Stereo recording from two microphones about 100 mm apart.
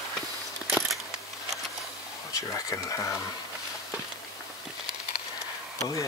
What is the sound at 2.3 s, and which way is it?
Speech, 35° left (ahead or behind).